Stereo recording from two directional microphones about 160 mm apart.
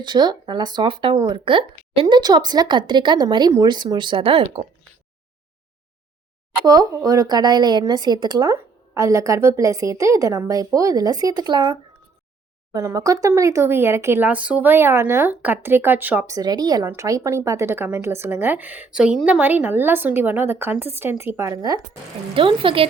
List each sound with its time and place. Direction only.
0.0 s speech: 30° right (ahead or behind)
6.7 s speech: 25° right (ahead or behind)
16.3 s speech: 25° right (ahead or behind)
22.4 s speech: 35° right (ahead or behind)